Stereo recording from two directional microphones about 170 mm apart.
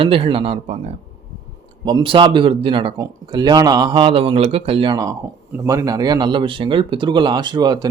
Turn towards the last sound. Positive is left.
turn(degrees=-25)  # may be behind; listen again after turning